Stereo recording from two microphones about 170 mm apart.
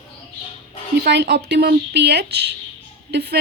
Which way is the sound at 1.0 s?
75° right (ahead or behind).